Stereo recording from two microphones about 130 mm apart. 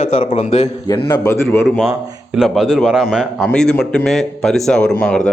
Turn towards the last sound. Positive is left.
turn(degrees=10)  # may be behind; listen again after turning